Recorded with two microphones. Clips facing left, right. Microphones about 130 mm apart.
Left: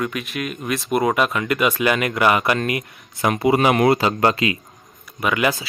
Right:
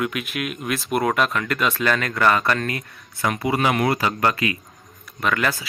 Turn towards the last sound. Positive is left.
turn(degrees=10)  # may be behind; listen again after turning